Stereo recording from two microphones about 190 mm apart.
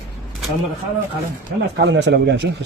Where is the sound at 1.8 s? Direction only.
65° right (ahead or behind).